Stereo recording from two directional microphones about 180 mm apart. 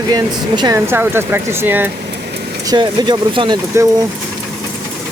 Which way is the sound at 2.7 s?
25° right (ahead or behind).